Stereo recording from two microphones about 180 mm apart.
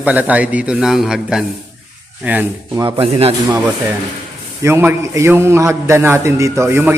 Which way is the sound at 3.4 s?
15° right (ahead or behind).